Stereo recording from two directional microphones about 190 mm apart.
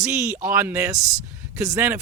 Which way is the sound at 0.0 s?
15° right (ahead or behind).